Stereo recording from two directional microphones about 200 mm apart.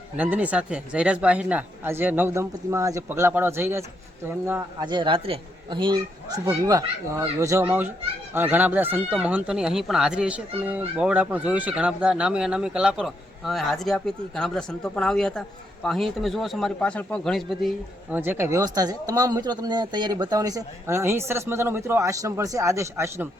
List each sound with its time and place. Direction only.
0.2 s a man's voice: 10° right (ahead or behind)
18.2 s speech: 10° right (ahead or behind)